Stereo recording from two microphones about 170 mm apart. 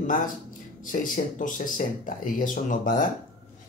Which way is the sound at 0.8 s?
50° left (ahead or behind).